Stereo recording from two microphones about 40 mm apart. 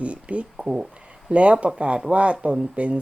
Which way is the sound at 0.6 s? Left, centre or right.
Centre.